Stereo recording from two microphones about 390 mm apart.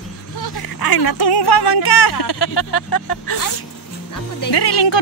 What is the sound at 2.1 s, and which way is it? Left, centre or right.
Speech, left.